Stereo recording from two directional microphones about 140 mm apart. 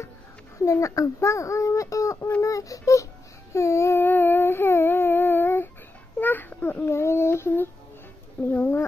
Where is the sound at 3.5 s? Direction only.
20° left (ahead or behind).